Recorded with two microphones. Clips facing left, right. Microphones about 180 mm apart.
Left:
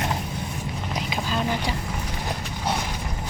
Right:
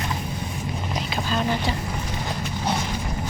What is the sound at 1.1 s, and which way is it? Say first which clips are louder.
Boat: right 2 dB; 10° left (ahead or behind).